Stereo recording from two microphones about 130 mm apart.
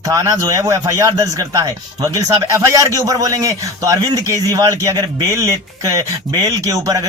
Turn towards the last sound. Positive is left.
turn(degrees=-25)  # may be behind; listen again after turning